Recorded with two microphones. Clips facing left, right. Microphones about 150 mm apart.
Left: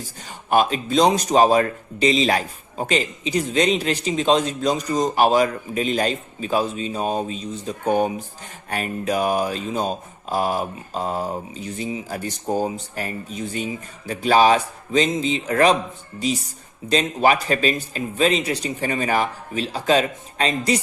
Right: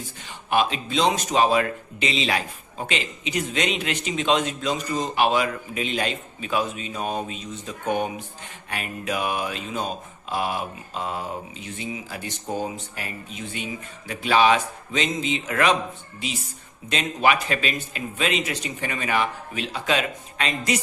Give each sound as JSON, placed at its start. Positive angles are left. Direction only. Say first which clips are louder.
{"t": 0.3, "sound": "a man's voice", "louder": "left 4 dB", "side_deg": 45}